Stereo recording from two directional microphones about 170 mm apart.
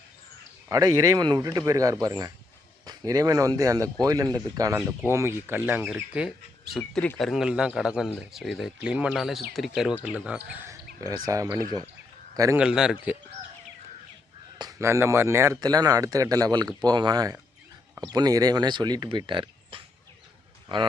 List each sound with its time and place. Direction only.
0.7 s speech: 20° right (ahead or behind)
12.5 s speech: 5° right (ahead or behind)
14.6 s speech: 20° right (ahead or behind)